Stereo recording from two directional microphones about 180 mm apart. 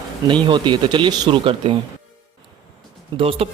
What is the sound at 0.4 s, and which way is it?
Speech, 25° right (ahead or behind).